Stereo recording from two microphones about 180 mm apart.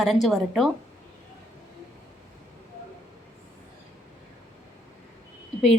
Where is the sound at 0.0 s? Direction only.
Centre (ahead or behind).